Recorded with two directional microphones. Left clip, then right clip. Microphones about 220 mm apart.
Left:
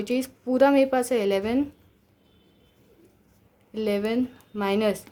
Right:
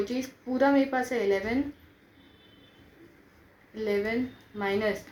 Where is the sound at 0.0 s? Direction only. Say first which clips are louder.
Left 4 dB; 50° left (ahead or behind).